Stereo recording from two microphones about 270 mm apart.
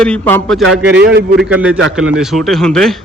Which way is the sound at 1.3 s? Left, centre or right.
Centre.